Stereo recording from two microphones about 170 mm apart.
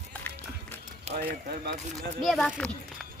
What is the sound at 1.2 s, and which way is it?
Speech, 70° right (ahead or behind).